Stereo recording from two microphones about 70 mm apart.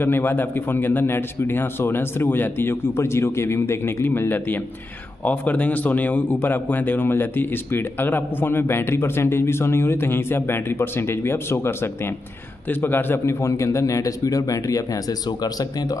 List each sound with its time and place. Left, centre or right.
0.0 s speech: left
13.2 s speech: left